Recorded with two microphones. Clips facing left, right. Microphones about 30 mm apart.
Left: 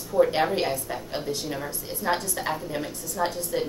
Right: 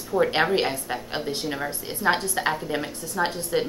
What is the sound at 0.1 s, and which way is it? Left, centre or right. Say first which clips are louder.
A woman's voice: even; right.